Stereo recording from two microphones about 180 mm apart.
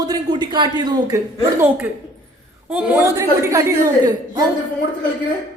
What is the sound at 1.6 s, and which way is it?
A woman's voice, 10° right (ahead or behind).